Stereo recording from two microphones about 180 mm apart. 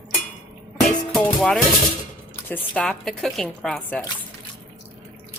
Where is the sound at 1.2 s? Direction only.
5° left (ahead or behind).